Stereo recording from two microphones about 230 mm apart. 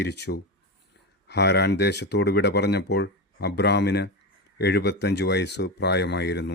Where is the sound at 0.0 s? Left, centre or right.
Left.